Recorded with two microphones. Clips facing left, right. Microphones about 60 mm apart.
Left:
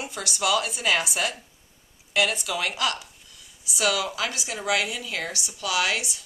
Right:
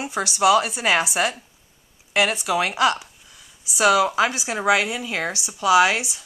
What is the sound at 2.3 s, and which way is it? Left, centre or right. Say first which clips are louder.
Speech: right 6 dB; right.